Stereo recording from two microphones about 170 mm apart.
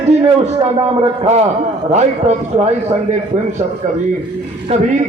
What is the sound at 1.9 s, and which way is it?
A man's voice, 40° right (ahead or behind).